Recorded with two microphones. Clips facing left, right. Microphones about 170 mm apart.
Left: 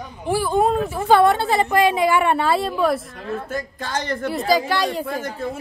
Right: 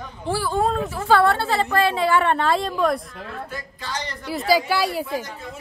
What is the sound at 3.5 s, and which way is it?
Speech, 50° left (ahead or behind).